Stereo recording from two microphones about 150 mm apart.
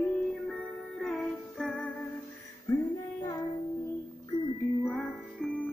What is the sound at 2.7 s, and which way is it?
Music, 25° left (ahead or behind).